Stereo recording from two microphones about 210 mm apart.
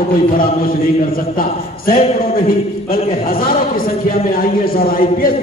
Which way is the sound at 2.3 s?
45° left (ahead or behind).